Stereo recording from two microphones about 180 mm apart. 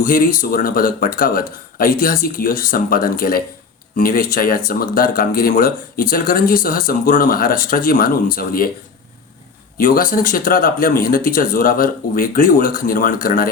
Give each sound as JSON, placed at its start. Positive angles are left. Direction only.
{"t": 0.0, "sound": "speech", "side_deg": 50}
{"t": 9.7, "sound": "speech", "side_deg": 50}